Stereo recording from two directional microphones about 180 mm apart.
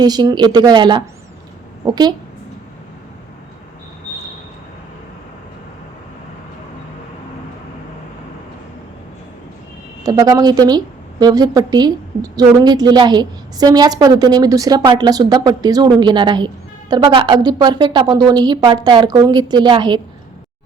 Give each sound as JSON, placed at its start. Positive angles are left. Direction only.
{"t": 0.0, "sound": "a woman's voice", "side_deg": -20}
{"t": 10.0, "sound": "a woman's voice", "side_deg": -20}